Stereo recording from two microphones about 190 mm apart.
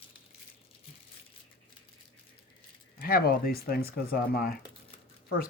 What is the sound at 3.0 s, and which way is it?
Speech, 50° left (ahead or behind).